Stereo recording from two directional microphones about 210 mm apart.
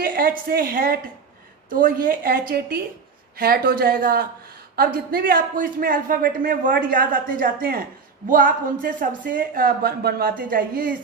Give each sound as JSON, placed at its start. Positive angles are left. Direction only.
{"t": 0.0, "sound": "a woman's voice", "side_deg": -45}